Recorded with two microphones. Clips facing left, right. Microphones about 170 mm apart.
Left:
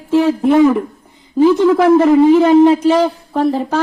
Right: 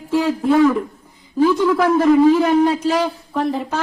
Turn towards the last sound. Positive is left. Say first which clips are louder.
# left 5 dB
turn(degrees=30)  # may be behind; listen again after turning